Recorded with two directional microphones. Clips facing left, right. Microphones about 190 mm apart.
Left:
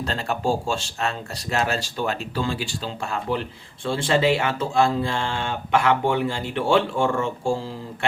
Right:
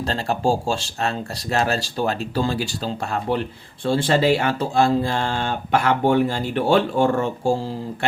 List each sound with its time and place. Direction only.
0.0 s speech: 35° right (ahead or behind)